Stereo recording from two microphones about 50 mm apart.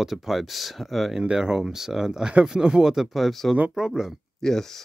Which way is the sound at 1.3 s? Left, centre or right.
Centre.